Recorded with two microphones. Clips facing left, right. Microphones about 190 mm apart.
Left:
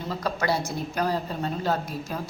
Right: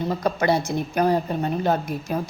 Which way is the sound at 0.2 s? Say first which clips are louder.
Right 3 dB; 20° right (ahead or behind).